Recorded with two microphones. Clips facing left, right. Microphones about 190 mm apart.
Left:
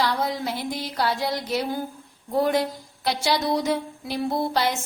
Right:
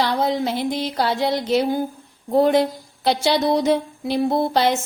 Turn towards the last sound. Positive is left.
turn(degrees=-25)  # may be behind; listen again after turning